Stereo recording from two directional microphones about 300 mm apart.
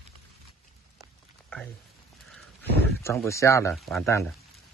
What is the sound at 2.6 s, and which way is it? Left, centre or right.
Speech, centre.